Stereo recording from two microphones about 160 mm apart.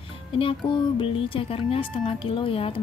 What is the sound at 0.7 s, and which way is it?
Speech, 30° left (ahead or behind).